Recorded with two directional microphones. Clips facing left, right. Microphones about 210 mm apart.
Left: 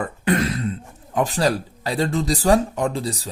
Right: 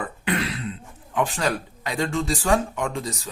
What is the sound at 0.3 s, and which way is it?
Cough, 45° left (ahead or behind).